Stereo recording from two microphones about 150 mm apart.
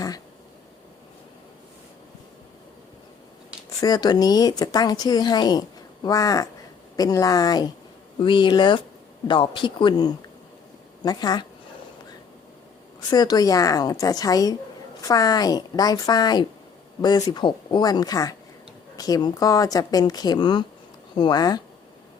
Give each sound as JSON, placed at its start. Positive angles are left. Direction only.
{"t": 3.8, "sound": "speech", "side_deg": 25}
{"t": 13.1, "sound": "speech", "side_deg": 25}